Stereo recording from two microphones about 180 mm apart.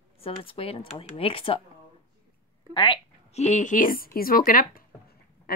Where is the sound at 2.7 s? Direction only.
30° left (ahead or behind); by 4.8 s 50° left (ahead or behind).